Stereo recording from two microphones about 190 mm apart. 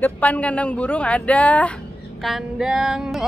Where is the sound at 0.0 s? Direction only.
10° left (ahead or behind).